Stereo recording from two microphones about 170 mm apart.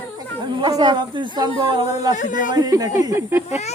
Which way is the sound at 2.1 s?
50° left (ahead or behind).